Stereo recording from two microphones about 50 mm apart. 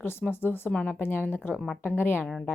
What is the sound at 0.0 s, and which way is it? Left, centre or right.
Speech, left.